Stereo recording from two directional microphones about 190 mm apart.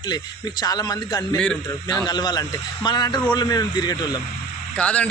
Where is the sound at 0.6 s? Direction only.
20° left (ahead or behind).